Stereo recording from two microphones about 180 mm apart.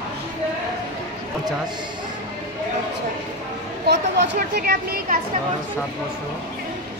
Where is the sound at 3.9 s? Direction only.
70° right (ahead or behind).